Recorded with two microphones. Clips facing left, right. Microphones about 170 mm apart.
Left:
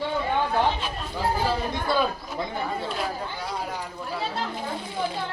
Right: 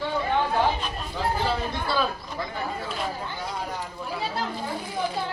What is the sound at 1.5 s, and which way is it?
Speech, 15° left (ahead or behind).